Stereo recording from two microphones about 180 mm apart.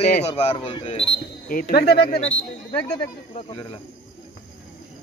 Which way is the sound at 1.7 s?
60° left (ahead or behind).